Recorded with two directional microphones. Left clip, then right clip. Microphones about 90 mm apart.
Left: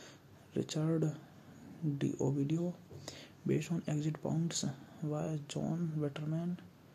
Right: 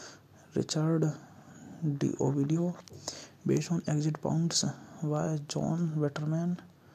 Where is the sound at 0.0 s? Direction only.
30° right (ahead or behind).